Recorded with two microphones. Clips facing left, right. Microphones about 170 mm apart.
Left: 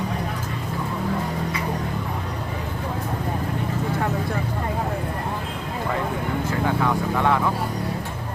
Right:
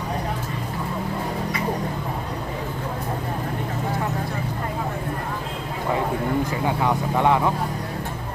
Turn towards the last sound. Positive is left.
turn(degrees=-20)  # may be behind; listen again after turning